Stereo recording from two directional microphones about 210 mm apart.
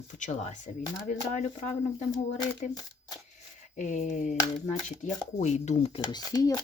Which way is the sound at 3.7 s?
35° left (ahead or behind).